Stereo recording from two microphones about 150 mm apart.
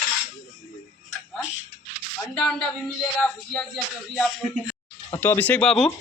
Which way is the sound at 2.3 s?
5° left (ahead or behind).